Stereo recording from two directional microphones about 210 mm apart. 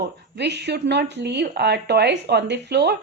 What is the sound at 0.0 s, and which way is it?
A woman's voice, 55° right (ahead or behind).